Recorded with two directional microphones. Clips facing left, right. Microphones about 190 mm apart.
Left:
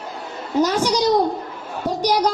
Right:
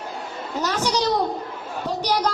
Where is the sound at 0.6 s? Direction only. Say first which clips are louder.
Left 5 dB; 10° left (ahead or behind).